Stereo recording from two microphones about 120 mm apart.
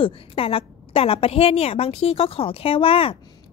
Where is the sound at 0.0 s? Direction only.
50° left (ahead or behind).